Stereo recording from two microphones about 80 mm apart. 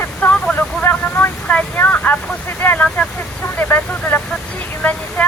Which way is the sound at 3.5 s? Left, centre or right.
Left.